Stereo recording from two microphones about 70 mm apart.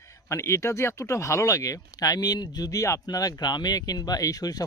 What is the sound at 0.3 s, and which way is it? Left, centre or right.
Speech, left.